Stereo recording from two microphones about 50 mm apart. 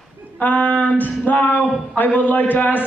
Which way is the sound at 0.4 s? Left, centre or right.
Left.